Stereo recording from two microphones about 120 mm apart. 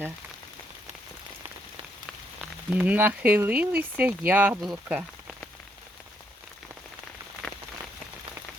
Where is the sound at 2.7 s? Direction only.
15° right (ahead or behind).